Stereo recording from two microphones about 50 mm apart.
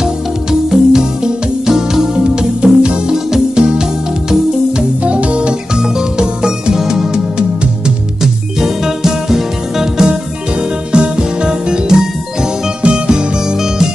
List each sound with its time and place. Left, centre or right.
0.0 s music: centre
5.0 s music: right